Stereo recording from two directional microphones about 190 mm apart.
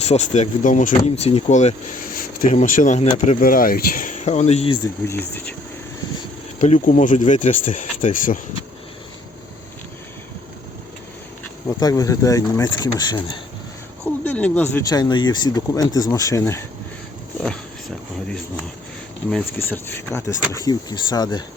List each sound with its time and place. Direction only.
0.0 s speech: 35° left (ahead or behind)
5.0 s speech: 10° left (ahead or behind)
6.6 s speech: 40° left (ahead or behind)
11.8 s speech: 20° left (ahead or behind)
14.3 s speech: 10° left (ahead or behind)
17.4 s a sound: 5° left (ahead or behind)
19.5 s speech: 10° left (ahead or behind)